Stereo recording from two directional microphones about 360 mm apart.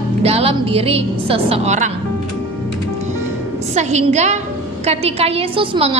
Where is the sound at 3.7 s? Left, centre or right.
Centre.